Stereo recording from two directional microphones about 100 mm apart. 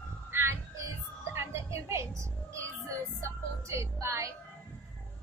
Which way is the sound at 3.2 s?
30° right (ahead or behind).